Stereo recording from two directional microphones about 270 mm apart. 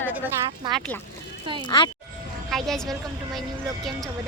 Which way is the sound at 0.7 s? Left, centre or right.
Centre.